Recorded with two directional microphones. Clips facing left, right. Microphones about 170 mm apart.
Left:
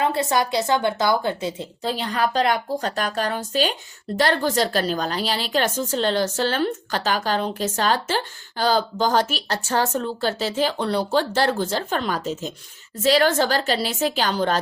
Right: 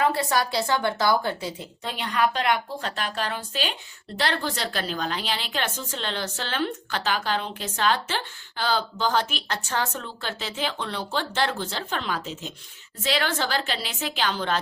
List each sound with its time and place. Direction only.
0.0 s a woman's voice: 20° left (ahead or behind)
1.8 s a woman's voice: 35° left (ahead or behind)